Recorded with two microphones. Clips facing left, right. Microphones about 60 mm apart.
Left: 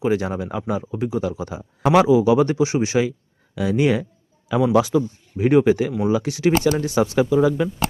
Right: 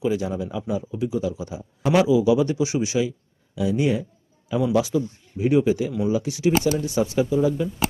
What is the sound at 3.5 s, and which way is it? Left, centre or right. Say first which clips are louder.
Speech: left 3 dB; left.